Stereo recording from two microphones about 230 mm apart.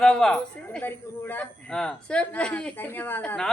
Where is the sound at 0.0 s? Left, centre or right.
Centre.